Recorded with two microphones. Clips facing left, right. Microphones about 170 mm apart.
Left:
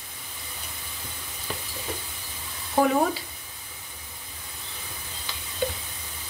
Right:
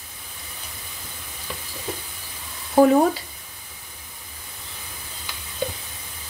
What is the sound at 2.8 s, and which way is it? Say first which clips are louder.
Speech: right 7 dB; 35° right (ahead or behind).